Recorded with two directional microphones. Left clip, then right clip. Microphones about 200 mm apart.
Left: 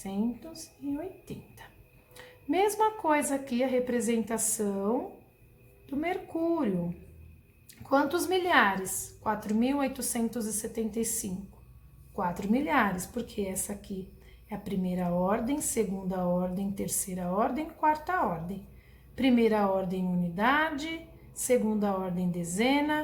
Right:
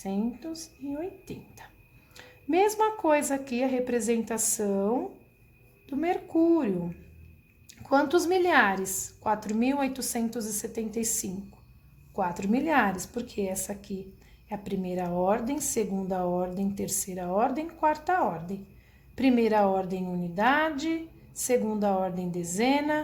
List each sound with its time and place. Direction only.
0.0 s a woman's voice: 35° right (ahead or behind)
2.1 s a woman's voice: 35° right (ahead or behind)
7.7 s a woman's voice: 40° right (ahead or behind)